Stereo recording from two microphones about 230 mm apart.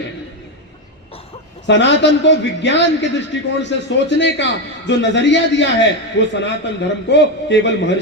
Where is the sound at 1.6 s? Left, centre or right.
Left.